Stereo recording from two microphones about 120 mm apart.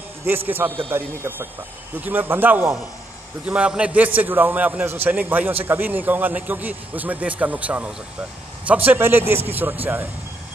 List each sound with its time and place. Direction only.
0.5 s a man's voice: 15° right (ahead or behind)